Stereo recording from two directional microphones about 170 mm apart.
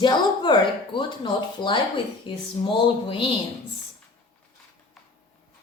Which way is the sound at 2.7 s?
30° left (ahead or behind).